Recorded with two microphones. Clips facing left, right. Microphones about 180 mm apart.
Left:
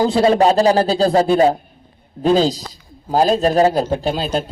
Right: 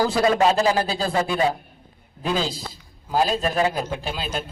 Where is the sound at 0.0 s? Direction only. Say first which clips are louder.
Left 5 dB; 25° left (ahead or behind).